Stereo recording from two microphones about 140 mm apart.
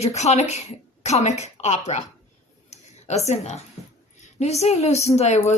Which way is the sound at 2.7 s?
50° left (ahead or behind).